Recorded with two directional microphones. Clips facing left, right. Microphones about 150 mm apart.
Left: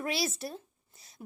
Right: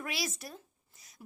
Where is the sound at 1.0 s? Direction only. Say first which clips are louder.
Left 5 dB; 30° left (ahead or behind).